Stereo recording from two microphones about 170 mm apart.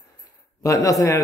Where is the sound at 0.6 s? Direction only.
20° left (ahead or behind).